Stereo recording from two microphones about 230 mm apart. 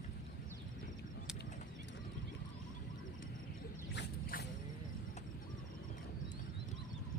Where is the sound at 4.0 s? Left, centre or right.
Left.